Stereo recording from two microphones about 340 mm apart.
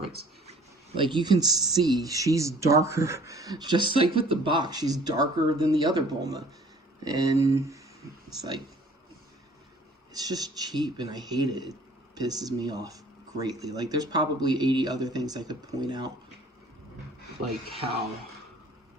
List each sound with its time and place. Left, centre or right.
0.9 s speech: centre
10.1 s a man's voice: centre
17.7 s speech: centre